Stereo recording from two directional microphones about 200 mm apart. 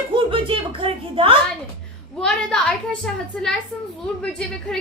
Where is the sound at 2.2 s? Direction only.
5° left (ahead or behind).